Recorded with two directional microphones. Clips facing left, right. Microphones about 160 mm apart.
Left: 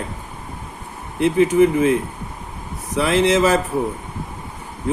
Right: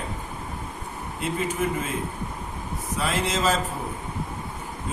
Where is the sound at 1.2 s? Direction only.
70° left (ahead or behind).